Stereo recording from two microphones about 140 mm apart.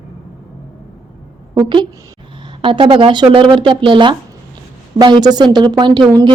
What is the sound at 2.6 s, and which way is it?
A woman's voice, 35° right (ahead or behind).